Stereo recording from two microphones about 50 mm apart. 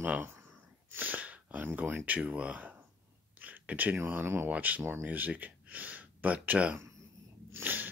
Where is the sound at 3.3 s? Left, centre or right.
Right.